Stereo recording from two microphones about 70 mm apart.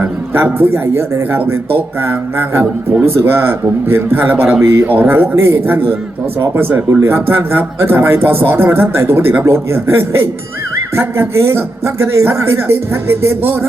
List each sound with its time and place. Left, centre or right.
0.0 s speech: right
4.6 s speech: right
4.9 s speech: right